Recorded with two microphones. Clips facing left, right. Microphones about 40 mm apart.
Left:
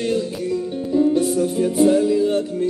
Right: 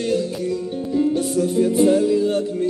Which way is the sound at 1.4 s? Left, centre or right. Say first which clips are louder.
Right 1 dB; centre.